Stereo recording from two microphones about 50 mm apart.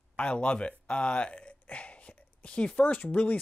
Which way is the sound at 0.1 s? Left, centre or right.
Left.